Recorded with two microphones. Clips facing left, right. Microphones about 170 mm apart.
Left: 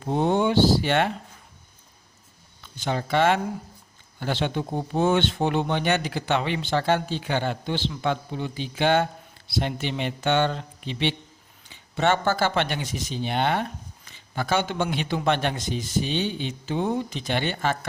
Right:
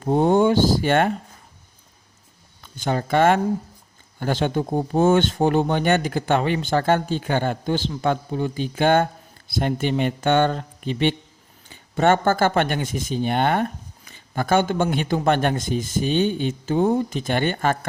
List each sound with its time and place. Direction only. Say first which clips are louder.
0.0 s speech: right 5 dB; 45° right (ahead or behind)
2.7 s speech: right 4 dB; 50° right (ahead or behind)